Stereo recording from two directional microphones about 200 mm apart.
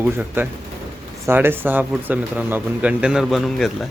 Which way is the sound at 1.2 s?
10° right (ahead or behind).